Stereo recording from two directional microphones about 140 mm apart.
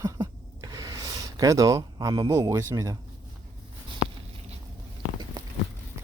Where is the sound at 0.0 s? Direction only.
25° right (ahead or behind).